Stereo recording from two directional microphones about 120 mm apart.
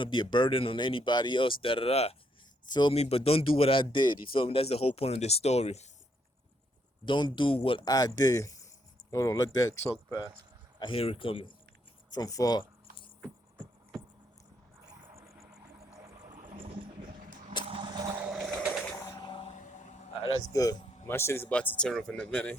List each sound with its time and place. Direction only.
0.0 s speech: 40° left (ahead or behind); by 2.1 s 55° left (ahead or behind)
2.6 s speech: 35° left (ahead or behind)
2.9 s speech: 55° left (ahead or behind)
7.0 s speech: 40° left (ahead or behind)
7.9 s speech: 30° left (ahead or behind)
10.8 s speech: 45° left (ahead or behind)
12.1 s a sound: 30° left (ahead or behind)
13.9 s a sound: 5° left (ahead or behind)
15.1 s vehicle: 25° right (ahead or behind)
17.7 s vehicle: 45° right (ahead or behind)
18.2 s a sound: 5° right (ahead or behind)
18.9 s a sound: 30° left (ahead or behind)
19.4 s vehicle: 75° left (ahead or behind)
20.5 s speech: 30° left (ahead or behind); by 22.5 s 10° left (ahead or behind)